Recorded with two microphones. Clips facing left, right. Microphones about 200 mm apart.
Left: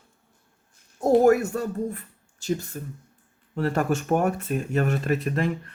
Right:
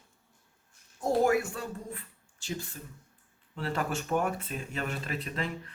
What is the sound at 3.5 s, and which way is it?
Speech, 45° left (ahead or behind).